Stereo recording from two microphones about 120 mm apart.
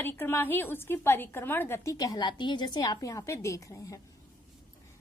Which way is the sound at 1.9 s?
35° left (ahead or behind).